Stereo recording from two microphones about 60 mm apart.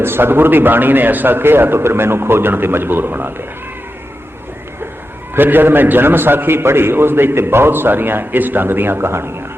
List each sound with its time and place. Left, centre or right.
0.0 s a man's voice: right
5.3 s a man's voice: right